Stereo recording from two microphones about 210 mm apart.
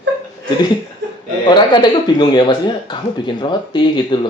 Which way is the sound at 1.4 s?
20° left (ahead or behind).